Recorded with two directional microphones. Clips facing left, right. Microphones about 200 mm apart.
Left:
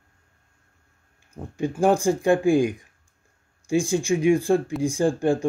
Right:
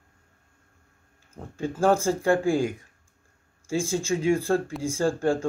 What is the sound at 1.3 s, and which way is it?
Speech, 15° left (ahead or behind).